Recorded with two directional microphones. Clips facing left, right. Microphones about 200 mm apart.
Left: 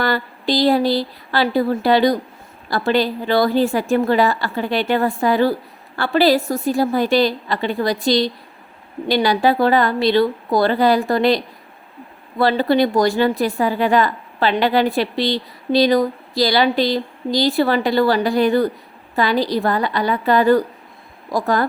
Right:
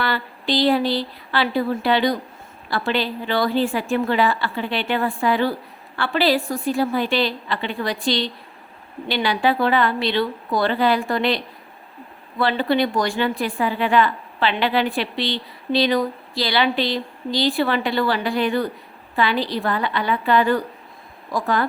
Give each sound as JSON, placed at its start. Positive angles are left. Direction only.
{"t": 0.0, "sound": "a woman's voice", "side_deg": 40}